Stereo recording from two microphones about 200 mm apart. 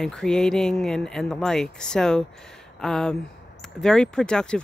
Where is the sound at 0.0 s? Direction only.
5° left (ahead or behind).